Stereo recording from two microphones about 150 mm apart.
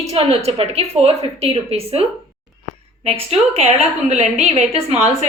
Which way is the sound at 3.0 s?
40° right (ahead or behind).